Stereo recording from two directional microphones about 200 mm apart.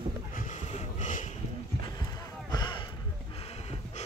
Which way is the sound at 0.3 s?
40° left (ahead or behind).